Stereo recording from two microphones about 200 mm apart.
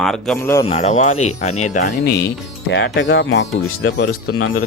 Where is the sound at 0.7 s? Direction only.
35° left (ahead or behind).